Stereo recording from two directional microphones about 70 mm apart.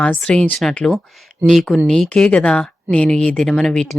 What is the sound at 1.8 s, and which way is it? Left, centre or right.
A woman's voice, centre.